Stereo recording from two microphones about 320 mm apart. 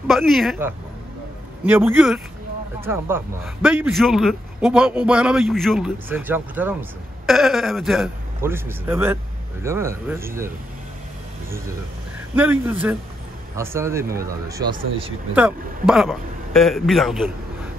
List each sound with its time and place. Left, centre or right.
0.0 s a man's voice: centre
12.4 s a man's voice: centre